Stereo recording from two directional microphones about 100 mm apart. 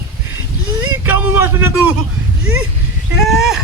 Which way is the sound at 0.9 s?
20° right (ahead or behind).